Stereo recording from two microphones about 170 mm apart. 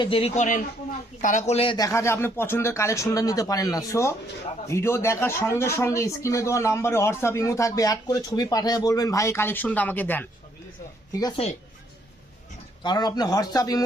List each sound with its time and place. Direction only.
0.0 s speech: 35° left (ahead or behind)
1.2 s speech: 45° left (ahead or behind); by 1.9 s 30° left (ahead or behind)
1.9 s speech: 15° left (ahead or behind)
11.1 s speech: 25° left (ahead or behind)
12.8 s speech: 25° left (ahead or behind)